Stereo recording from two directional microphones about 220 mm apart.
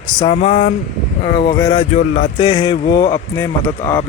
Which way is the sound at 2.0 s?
45° left (ahead or behind).